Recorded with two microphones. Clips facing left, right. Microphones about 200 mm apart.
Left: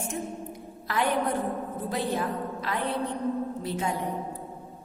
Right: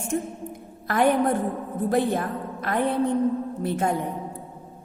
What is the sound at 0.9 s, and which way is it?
A woman's voice, 50° right (ahead or behind).